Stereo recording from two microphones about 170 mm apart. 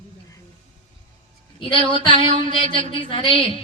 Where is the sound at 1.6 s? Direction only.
30° left (ahead or behind).